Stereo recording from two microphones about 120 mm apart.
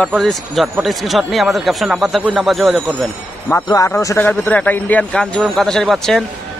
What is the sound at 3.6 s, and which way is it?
Speech, 30° left (ahead or behind).